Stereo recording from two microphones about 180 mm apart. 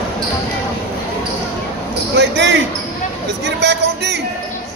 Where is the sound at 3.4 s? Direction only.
70° right (ahead or behind).